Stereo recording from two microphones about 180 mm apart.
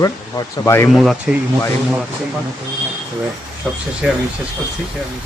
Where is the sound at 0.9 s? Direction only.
Centre (ahead or behind).